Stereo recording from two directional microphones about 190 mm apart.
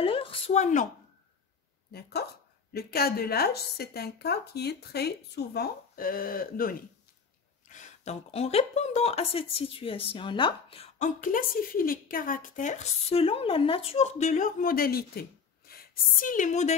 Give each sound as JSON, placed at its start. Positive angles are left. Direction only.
{"t": 0.0, "sound": "speech", "side_deg": 30}
{"t": 1.9, "sound": "speech", "side_deg": 55}
{"t": 7.6, "sound": "speech", "side_deg": 40}